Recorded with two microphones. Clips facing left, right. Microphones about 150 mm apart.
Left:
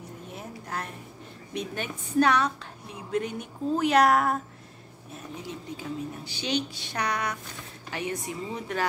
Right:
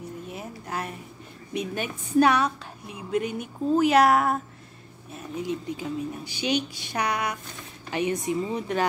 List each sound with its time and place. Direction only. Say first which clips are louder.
0.3 s a sound: even; 5° right (ahead or behind)
1.5 s a woman's voice: right 3 dB; 10° right (ahead or behind)
5.4 s a woman's voice: right 9 dB; 15° right (ahead or behind)